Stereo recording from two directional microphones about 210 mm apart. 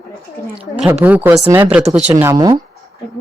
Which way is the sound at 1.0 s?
10° right (ahead or behind).